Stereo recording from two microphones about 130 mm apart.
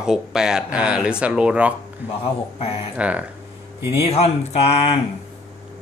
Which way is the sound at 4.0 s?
50° left (ahead or behind).